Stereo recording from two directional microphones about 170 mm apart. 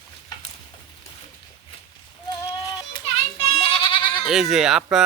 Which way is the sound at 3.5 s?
35° left (ahead or behind).